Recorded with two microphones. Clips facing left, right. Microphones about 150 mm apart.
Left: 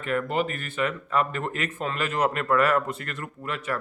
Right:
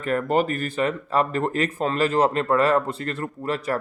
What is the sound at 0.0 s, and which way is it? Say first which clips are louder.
A man's voice: right 4 dB; 40° right (ahead or behind).